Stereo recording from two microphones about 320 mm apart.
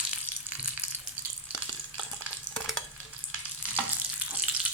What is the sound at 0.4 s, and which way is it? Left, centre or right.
Frying, centre.